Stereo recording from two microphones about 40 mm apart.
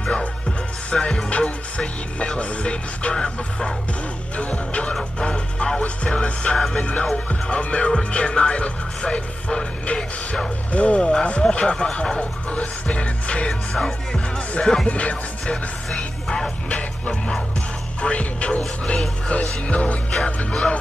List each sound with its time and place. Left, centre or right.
0.0 s music: left
10.7 s music: left
12.2 s music: left
13.5 s music: centre
14.9 s music: left
16.6 s music: left